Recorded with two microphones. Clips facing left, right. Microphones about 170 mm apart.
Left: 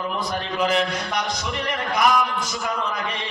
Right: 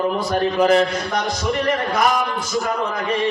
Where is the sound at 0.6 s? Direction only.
40° right (ahead or behind).